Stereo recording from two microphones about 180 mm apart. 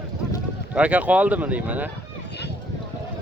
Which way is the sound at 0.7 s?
5° right (ahead or behind).